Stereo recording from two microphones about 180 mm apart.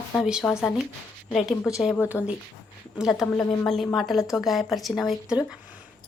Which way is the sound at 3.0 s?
Centre (ahead or behind).